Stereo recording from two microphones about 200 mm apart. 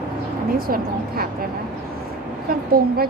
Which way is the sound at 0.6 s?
45° right (ahead or behind).